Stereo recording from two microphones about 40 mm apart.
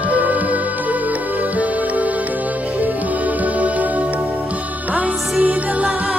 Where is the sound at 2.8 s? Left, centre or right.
Right.